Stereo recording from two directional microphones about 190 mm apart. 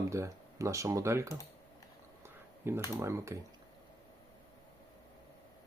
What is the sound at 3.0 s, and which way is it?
Speech, 15° right (ahead or behind).